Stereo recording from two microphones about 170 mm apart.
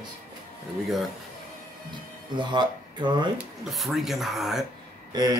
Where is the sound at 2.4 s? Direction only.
25° right (ahead or behind).